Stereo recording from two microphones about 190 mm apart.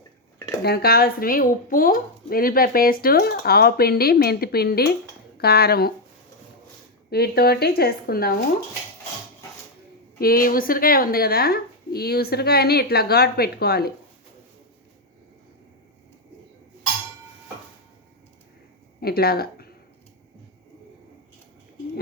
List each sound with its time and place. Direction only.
0.6 s a woman's voice: 55° left (ahead or behind)
7.1 s a woman's voice: 55° left (ahead or behind)
10.2 s a woman's voice: 50° left (ahead or behind)
18.9 s speech: 55° left (ahead or behind)